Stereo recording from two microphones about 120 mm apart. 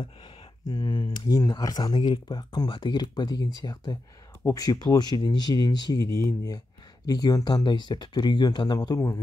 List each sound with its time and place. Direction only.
0.0 s speech: 40° left (ahead or behind)
7.1 s speech: 35° left (ahead or behind)